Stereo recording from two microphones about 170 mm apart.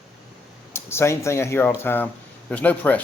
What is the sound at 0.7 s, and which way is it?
Speech, 15° left (ahead or behind).